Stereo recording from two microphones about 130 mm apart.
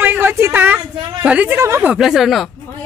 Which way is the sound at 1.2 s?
10° right (ahead or behind).